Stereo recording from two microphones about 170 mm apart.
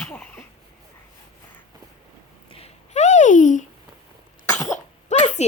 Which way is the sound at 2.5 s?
35° left (ahead or behind).